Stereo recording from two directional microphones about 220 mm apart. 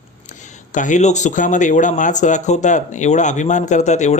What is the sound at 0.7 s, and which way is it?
Speech, 35° left (ahead or behind).